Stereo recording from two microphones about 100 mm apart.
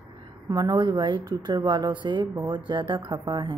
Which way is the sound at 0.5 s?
40° right (ahead or behind).